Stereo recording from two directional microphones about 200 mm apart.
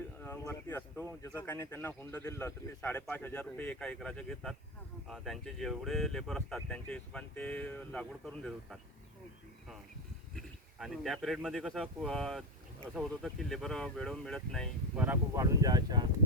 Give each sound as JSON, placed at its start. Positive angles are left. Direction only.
{"t": 0.2, "sound": "a man's voice", "side_deg": 10}
{"t": 10.3, "sound": "speech", "side_deg": 0}
{"t": 15.0, "sound": "speech", "side_deg": -15}